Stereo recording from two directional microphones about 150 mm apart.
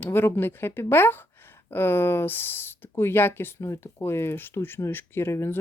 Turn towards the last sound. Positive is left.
turn(degrees=15)  # may be behind; listen again after turning